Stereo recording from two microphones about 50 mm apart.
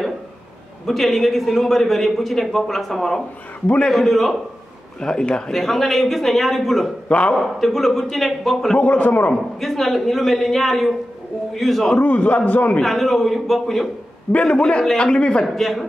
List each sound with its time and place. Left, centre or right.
0.8 s a man's voice: centre
3.6 s a man's voice: left
3.9 s a man's voice: centre
5.0 s a man's voice: centre
5.5 s a man's voice: centre
7.1 s a man's voice: left
7.3 s a man's voice: centre
8.7 s a man's voice: left
9.6 s a man's voice: centre
12.0 s a man's voice: left
12.8 s a man's voice: centre
14.3 s a man's voice: centre
15.4 s a man's voice: centre